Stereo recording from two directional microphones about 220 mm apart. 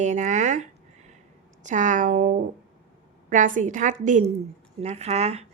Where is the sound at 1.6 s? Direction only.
35° right (ahead or behind).